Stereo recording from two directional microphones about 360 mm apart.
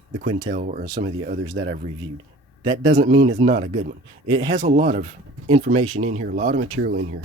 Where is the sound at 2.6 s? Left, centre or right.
Centre.